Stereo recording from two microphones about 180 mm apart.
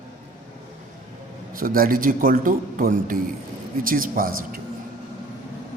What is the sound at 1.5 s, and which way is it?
A man's voice, 50° right (ahead or behind).